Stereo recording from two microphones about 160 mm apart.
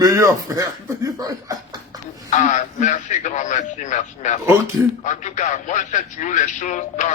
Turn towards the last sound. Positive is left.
turn(degrees=50)  # may be behind; listen again after turning